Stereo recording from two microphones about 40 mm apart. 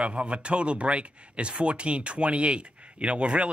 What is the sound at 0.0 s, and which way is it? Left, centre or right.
Speech, right.